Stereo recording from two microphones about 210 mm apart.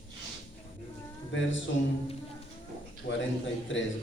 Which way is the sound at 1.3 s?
65° left (ahead or behind).